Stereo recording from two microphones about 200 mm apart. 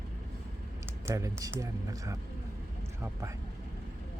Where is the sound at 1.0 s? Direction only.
15° right (ahead or behind).